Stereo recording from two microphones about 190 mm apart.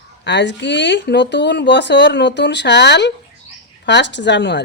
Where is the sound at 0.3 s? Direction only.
70° left (ahead or behind).